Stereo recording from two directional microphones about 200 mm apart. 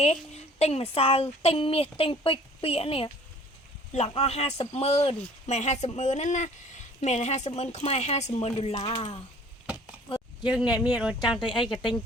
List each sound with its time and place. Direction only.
0.0 s a woman's voice: 30° left (ahead or behind)
10.4 s speech: 5° right (ahead or behind)